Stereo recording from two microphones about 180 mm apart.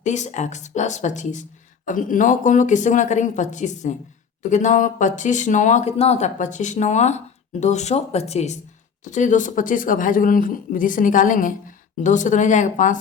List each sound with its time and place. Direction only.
0.0 s speech: 40° left (ahead or behind)